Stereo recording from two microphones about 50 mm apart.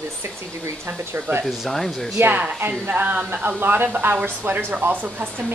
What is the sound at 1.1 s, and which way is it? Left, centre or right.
Speech, right.